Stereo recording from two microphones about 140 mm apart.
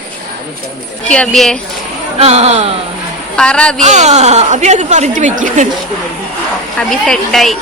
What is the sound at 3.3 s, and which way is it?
Speech, 5° left (ahead or behind).